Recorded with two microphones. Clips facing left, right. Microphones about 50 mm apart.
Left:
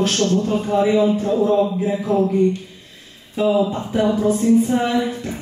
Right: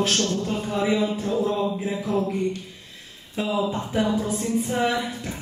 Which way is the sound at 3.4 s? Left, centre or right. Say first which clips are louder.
Left 7 dB; left.